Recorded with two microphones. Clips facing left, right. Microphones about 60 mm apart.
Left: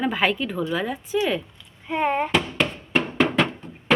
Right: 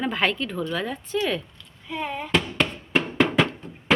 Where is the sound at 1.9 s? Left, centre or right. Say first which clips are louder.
Left 8 dB; left.